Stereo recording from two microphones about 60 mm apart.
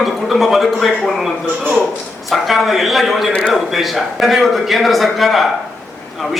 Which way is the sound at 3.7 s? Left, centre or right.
Centre.